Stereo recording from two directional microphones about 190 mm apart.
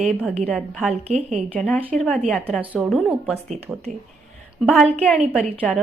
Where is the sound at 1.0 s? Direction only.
35° right (ahead or behind).